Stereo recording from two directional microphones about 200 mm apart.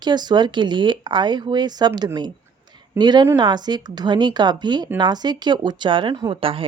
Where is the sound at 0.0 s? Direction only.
20° right (ahead or behind).